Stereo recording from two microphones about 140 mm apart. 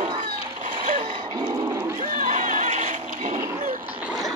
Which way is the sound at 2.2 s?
65° right (ahead or behind).